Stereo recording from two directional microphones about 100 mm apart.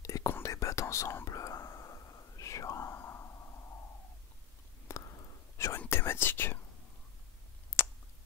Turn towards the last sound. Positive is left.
turn(degrees=25)  # may be behind; listen again after turning